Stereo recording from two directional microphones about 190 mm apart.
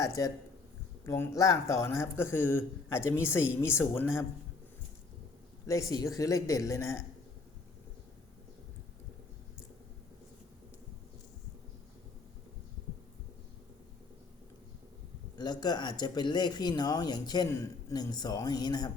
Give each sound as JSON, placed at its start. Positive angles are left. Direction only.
{"t": 0.0, "sound": "speech", "side_deg": 15}
{"t": 5.6, "sound": "speech", "side_deg": 15}
{"t": 15.4, "sound": "speech", "side_deg": 20}